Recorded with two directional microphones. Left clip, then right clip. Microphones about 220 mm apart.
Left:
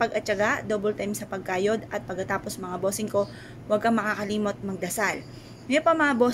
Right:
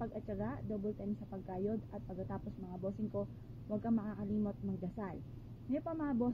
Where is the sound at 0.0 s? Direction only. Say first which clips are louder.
Left 19 dB; centre (ahead or behind).